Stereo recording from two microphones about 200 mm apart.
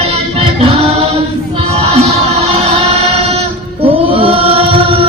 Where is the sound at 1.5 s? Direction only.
30° right (ahead or behind).